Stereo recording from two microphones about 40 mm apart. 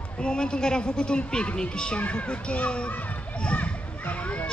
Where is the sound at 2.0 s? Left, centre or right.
Left.